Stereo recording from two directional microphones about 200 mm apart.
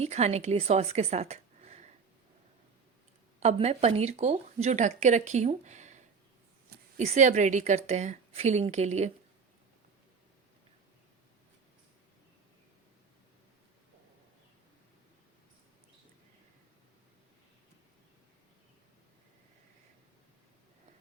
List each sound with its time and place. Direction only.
0.0 s a woman's voice: 35° right (ahead or behind)
3.4 s speech: 30° right (ahead or behind)